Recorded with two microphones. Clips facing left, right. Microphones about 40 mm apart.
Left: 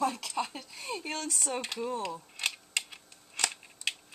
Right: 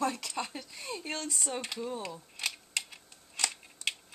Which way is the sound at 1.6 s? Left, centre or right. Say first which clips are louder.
Left 2 dB; left.